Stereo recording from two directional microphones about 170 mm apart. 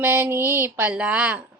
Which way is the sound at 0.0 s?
15° right (ahead or behind).